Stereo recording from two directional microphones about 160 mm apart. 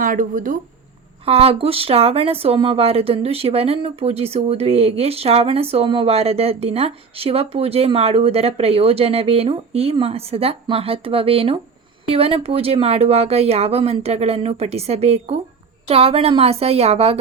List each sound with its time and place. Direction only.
0.0 s speech: 55° right (ahead or behind)
1.2 s speech: 40° right (ahead or behind)